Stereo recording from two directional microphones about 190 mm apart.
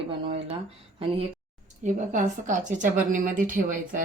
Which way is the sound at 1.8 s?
40° right (ahead or behind).